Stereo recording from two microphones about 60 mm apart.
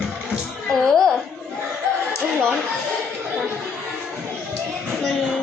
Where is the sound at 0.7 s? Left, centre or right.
Centre.